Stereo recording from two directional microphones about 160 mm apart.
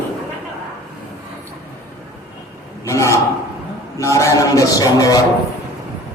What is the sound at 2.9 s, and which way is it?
Speech, 20° left (ahead or behind).